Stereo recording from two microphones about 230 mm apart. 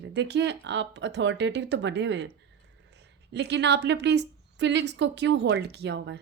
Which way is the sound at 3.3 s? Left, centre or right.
Right.